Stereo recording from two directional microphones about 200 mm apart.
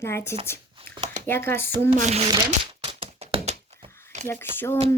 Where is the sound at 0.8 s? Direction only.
25° right (ahead or behind).